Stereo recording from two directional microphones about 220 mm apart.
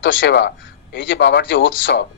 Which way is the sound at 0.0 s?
55° left (ahead or behind).